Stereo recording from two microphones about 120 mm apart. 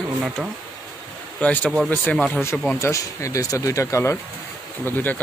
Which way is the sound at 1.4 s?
10° left (ahead or behind).